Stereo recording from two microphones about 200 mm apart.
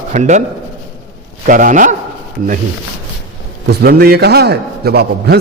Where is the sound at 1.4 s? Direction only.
40° right (ahead or behind).